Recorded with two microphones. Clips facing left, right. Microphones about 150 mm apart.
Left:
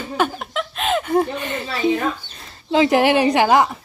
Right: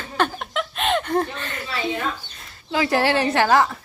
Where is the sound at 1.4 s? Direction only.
20° left (ahead or behind).